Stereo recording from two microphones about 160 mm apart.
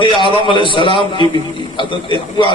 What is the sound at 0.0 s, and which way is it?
A man's voice, 30° left (ahead or behind).